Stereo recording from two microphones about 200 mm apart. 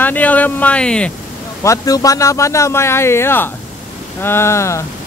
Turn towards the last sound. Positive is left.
turn(degrees=15)  # may be behind; listen again after turning